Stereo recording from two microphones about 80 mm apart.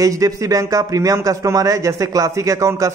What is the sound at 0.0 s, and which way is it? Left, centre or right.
A man's voice, right.